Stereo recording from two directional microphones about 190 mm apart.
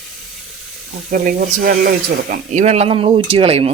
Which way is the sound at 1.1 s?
45° right (ahead or behind).